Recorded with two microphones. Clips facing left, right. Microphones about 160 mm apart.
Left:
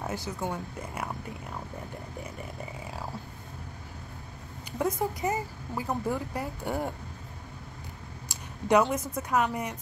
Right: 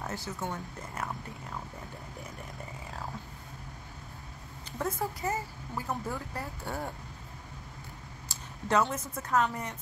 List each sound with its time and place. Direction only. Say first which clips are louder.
0.0 s speech: left 3 dB; 15° left (ahead or behind)
4.7 s speech: left 4 dB; 15° left (ahead or behind)
8.3 s a sound: left 6 dB; 15° left (ahead or behind)
9.1 s speech: left 2 dB; 15° left (ahead or behind)